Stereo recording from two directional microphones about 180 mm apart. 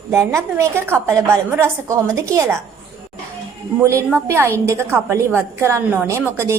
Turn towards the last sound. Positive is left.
turn(degrees=-15)  # may be behind; listen again after turning